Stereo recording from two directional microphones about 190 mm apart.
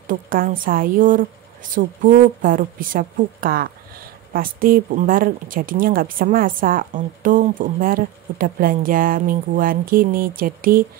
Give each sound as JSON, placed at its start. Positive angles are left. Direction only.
{"t": 0.0, "sound": "speech", "side_deg": -45}